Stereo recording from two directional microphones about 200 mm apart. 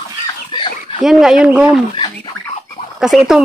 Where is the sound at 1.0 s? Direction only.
Centre (ahead or behind).